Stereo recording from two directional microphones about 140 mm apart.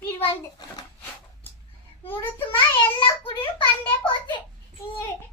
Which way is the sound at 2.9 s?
40° left (ahead or behind).